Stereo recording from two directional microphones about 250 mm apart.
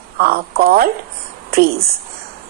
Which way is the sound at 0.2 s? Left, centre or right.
Right.